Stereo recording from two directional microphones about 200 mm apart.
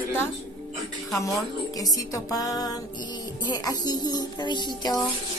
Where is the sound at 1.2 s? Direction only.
15° left (ahead or behind).